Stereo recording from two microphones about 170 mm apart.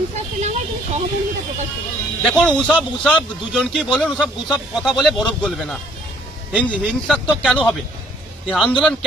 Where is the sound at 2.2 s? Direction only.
5° left (ahead or behind).